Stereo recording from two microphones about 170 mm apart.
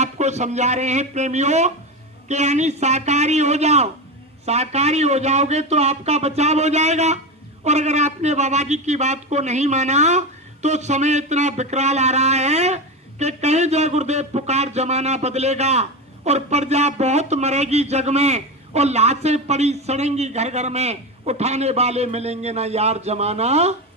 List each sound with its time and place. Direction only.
0.0 s a man's voice: 40° right (ahead or behind)